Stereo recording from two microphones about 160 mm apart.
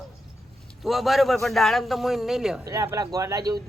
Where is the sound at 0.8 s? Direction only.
Centre (ahead or behind).